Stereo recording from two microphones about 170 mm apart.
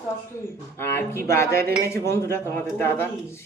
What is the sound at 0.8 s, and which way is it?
Speech, 15° left (ahead or behind).